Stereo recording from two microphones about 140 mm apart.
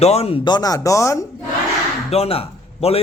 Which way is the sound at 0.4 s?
30° left (ahead or behind).